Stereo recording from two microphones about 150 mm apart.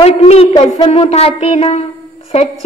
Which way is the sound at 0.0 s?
45° left (ahead or behind).